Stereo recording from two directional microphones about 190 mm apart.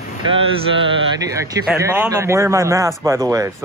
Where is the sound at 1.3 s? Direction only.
15° right (ahead or behind).